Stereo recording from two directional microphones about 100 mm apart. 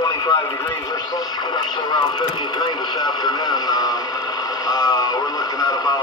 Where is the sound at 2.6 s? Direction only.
45° left (ahead or behind).